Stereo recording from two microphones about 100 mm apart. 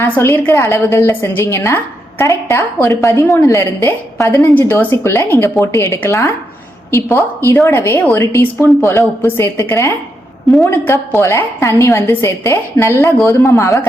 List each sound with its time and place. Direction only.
0.0 s a woman's voice: 25° left (ahead or behind)